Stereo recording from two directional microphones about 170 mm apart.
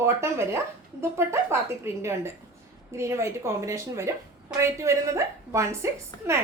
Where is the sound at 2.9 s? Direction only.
15° right (ahead or behind).